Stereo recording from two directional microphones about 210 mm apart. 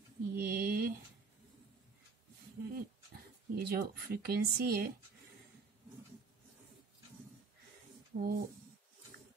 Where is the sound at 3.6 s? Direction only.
45° right (ahead or behind).